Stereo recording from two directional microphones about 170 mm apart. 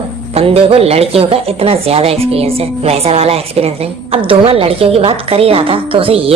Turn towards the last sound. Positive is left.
turn(degrees=-35)  # may be behind; listen again after turning